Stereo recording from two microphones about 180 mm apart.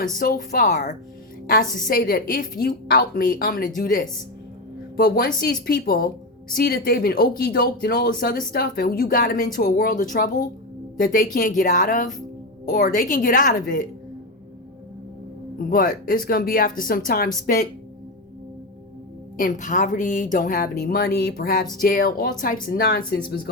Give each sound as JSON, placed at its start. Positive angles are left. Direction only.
{"t": 0.2, "sound": "speech", "side_deg": 50}
{"t": 1.9, "sound": "a woman's voice", "side_deg": 55}
{"t": 4.9, "sound": "a woman's voice", "side_deg": 55}
{"t": 15.5, "sound": "speech", "side_deg": 50}
{"t": 19.4, "sound": "speech", "side_deg": 45}